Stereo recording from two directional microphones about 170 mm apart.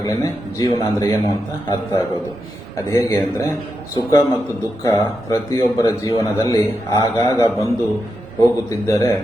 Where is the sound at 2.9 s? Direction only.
15° left (ahead or behind).